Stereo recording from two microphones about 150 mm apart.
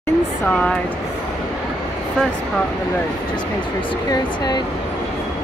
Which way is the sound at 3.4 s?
30° left (ahead or behind).